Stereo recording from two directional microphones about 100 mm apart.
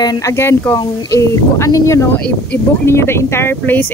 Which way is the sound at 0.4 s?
25° left (ahead or behind).